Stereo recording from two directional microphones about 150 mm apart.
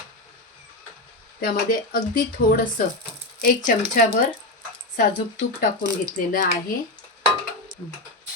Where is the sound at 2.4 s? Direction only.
90° left.